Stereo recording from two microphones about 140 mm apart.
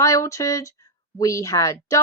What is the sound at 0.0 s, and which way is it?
Speech, 20° left (ahead or behind).